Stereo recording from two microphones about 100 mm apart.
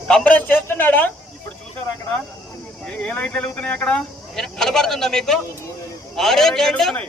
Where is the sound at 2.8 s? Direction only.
10° left (ahead or behind).